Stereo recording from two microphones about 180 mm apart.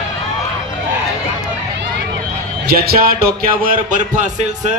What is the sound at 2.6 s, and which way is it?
Speech, 60° right (ahead or behind).